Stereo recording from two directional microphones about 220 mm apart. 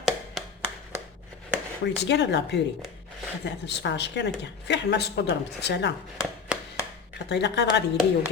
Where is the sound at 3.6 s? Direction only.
50° left (ahead or behind).